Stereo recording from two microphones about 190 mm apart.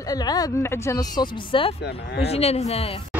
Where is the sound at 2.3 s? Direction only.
35° left (ahead or behind).